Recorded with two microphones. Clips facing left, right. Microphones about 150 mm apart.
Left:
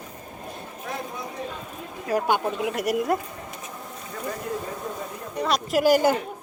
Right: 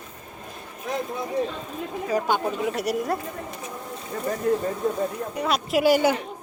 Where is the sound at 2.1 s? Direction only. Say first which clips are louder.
Left 1 dB; 10° left (ahead or behind).